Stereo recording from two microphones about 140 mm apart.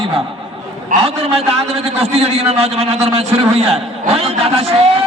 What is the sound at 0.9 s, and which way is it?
Speech, 75° right (ahead or behind).